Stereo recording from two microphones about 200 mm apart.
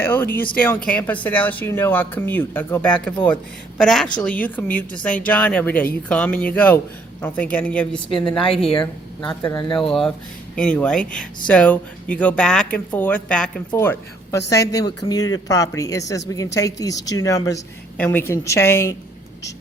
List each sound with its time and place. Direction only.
0.0 s a woman's voice: 10° left (ahead or behind)
8.1 s a woman's voice: 25° left (ahead or behind)
8.8 s speech: 5° left (ahead or behind)
9.4 s a woman's voice: 20° left (ahead or behind)
9.8 s a woman's voice: centre (ahead or behind)